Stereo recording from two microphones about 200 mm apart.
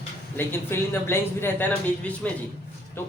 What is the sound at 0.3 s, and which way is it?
Speech, 10° left (ahead or behind).